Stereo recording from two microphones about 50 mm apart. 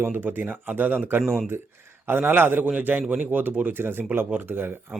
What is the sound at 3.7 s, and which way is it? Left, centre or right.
Speech, right.